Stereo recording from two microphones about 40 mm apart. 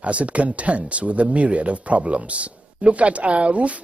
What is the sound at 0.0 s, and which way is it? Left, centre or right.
Speech, right.